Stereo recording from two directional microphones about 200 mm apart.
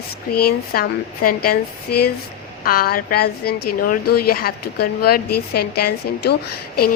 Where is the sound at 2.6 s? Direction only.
45° left (ahead or behind).